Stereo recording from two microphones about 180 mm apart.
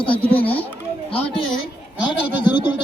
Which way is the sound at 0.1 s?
10° left (ahead or behind).